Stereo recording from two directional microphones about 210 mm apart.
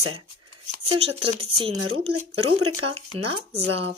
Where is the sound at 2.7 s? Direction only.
25° right (ahead or behind).